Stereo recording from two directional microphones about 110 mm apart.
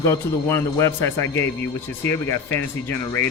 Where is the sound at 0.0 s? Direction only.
25° left (ahead or behind).